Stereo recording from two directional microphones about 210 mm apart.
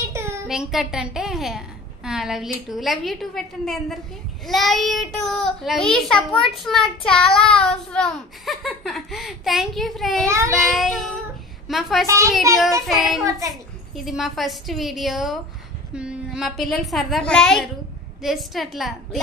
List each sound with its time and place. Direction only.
0.1 s a sound: 15° right (ahead or behind)
0.5 s child singing: centre (ahead or behind)
10.2 s a child's voice: 15° right (ahead or behind)
10.5 s child singing: centre (ahead or behind)
13.2 s a child's voice: 15° right (ahead or behind)
13.9 s child singing: centre (ahead or behind)